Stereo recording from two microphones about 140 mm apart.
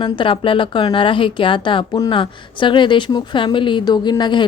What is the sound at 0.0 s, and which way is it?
A woman's voice, 35° left (ahead or behind).